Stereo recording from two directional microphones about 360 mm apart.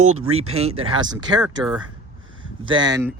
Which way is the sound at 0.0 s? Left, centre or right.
Right.